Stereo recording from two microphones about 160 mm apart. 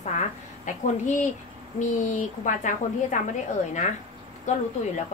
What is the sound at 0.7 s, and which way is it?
A woman's voice, 50° left (ahead or behind).